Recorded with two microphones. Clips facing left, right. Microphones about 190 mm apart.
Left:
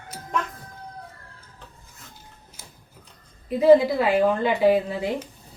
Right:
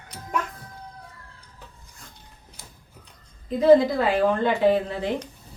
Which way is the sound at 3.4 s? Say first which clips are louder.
Left 1 dB; 10° left (ahead or behind).